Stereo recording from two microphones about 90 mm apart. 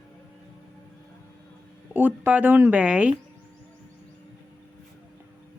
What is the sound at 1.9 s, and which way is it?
Speech, 20° right (ahead or behind).